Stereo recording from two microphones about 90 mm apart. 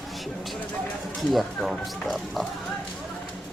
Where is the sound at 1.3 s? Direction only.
Centre (ahead or behind).